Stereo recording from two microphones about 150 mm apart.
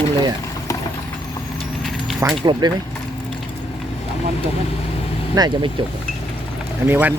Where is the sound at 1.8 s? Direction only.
Centre (ahead or behind).